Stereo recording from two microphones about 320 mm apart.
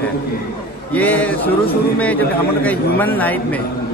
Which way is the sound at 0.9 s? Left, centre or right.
Centre.